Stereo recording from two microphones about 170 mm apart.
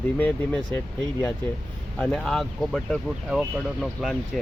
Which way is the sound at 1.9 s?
5° left (ahead or behind).